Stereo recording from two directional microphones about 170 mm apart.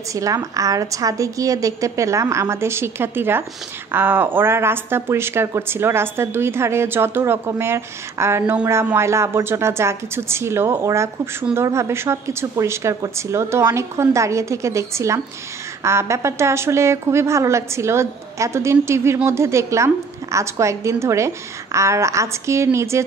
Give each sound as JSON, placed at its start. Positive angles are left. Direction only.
{"t": 0.1, "sound": "a woman's voice", "side_deg": -20}